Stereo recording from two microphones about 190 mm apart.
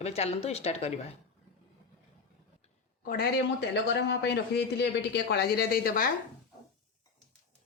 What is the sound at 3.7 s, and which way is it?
Speech, 65° left (ahead or behind).